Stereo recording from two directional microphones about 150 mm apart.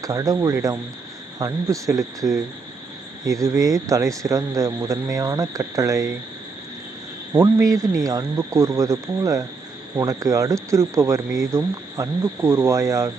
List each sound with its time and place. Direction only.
0.0 s speech: 20° right (ahead or behind)
3.2 s speech: 20° right (ahead or behind)
7.3 s speech: 25° right (ahead or behind)